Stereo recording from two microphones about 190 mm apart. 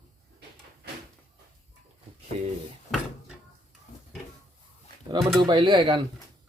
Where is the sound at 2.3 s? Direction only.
35° right (ahead or behind).